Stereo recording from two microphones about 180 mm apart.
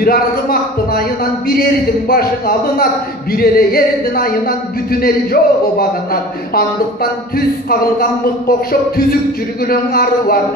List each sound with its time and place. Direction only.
0.0 s a man's voice: 55° left (ahead or behind)
2.0 s a man's voice: 55° left (ahead or behind)